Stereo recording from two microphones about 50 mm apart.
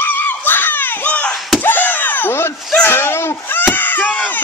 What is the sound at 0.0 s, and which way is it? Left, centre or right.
Screaming, left.